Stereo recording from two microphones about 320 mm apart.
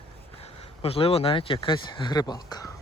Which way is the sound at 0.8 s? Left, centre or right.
Centre.